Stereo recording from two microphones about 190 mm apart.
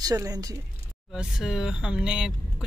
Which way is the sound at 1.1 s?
5° right (ahead or behind).